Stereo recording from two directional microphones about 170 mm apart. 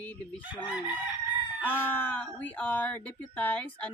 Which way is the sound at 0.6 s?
10° right (ahead or behind).